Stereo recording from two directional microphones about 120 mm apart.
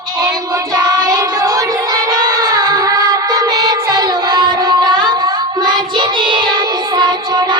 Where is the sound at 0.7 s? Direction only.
30° right (ahead or behind).